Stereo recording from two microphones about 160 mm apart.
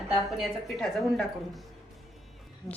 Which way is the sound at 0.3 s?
Centre (ahead or behind).